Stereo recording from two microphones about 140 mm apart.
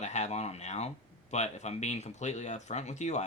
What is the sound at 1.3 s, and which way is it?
Speech, 55° left (ahead or behind).